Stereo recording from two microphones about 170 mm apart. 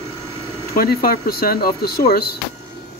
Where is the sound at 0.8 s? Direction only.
60° left (ahead or behind).